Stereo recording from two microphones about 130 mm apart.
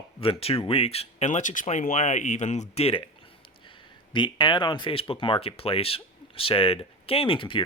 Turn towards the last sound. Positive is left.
turn(degrees=40)  # may be behind; listen again after turning